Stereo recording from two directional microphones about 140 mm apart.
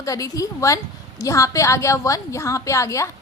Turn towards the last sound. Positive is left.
turn(degrees=20)  # may be behind; listen again after turning